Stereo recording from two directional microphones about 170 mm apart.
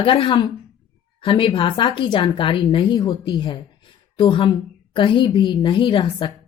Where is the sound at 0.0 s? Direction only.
30° left (ahead or behind).